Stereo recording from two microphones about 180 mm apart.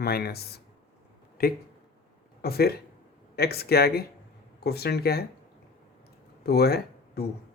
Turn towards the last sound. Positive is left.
turn(degrees=60)  # may be behind; listen again after turning